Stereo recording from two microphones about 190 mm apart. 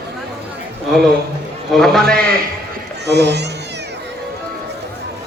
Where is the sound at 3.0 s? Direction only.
60° right (ahead or behind).